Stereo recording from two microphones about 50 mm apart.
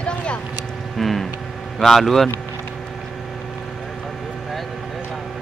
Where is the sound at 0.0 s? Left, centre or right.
Left.